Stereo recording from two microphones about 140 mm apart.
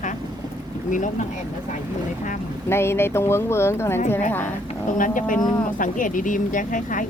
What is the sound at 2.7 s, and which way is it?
Speech, 15° left (ahead or behind).